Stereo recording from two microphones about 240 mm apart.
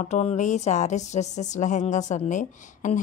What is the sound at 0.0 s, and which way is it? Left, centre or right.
Speech, left.